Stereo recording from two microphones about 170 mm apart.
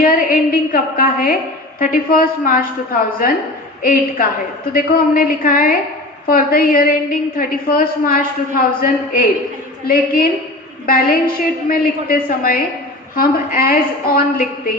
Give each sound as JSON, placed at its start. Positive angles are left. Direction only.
{"t": 0.0, "sound": "a woman's voice", "side_deg": 55}